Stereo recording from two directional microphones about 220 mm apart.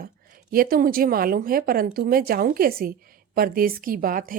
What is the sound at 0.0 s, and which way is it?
A woman's voice, 40° right (ahead or behind).